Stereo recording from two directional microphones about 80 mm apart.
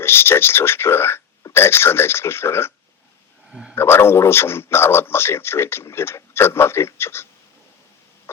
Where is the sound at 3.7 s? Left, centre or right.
Left.